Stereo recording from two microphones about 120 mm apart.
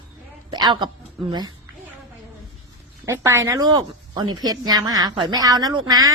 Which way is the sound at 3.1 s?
25° right (ahead or behind).